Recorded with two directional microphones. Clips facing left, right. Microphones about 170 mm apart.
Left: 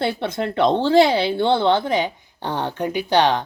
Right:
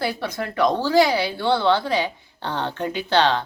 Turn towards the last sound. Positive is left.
turn(degrees=15)  # may be behind; listen again after turning